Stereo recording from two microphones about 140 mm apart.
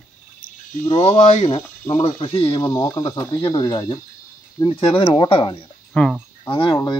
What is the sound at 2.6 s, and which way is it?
Speech, 20° left (ahead or behind).